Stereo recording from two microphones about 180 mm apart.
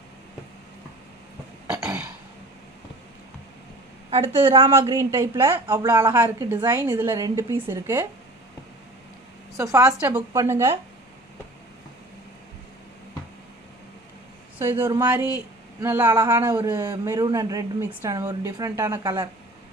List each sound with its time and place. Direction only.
1.7 s burping: 10° right (ahead or behind)
4.1 s a woman's voice: 30° right (ahead or behind)
4.7 s speech: 15° right (ahead or behind)
9.6 s speech: 15° right (ahead or behind)
14.6 s speech: 15° right (ahead or behind)